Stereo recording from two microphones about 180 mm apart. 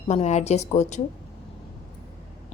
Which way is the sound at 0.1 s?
40° left (ahead or behind).